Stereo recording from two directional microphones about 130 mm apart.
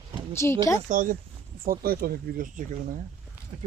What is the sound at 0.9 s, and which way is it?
Speech, 90° right.